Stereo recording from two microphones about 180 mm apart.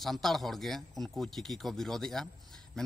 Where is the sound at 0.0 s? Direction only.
Centre (ahead or behind).